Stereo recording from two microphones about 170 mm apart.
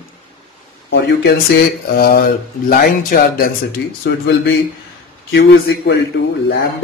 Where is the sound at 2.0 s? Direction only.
60° left (ahead or behind).